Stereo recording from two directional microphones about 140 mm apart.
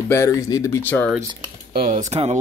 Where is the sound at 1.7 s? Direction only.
85° right.